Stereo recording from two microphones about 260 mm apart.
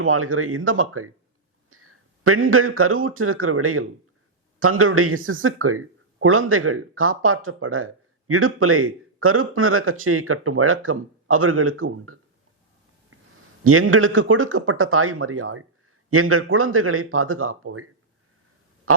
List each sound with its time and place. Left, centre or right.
0.0 s speech: right
13.7 s speech: right